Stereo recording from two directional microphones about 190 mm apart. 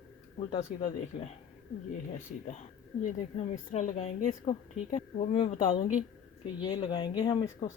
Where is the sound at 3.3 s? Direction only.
35° left (ahead or behind); by 7.7 s 20° left (ahead or behind).